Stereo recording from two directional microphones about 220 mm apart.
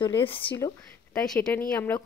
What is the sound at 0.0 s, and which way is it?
Speech, 20° left (ahead or behind).